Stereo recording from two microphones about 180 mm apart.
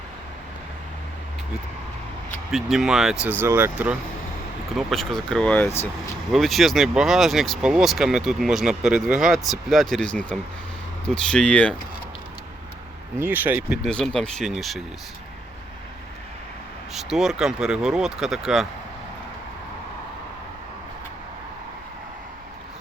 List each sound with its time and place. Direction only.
2.5 s speech: centre (ahead or behind)
4.9 s speech: centre (ahead or behind)
6.3 s speech: centre (ahead or behind)
13.1 s speech: 10° right (ahead or behind)
13.8 s speech: 5° left (ahead or behind)
16.9 s speech: centre (ahead or behind)